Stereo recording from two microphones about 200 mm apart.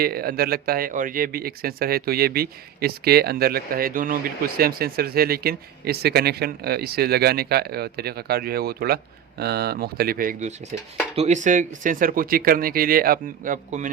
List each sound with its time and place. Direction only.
0.0 s speech: 50° right (ahead or behind)
11.1 s speech: 35° right (ahead or behind)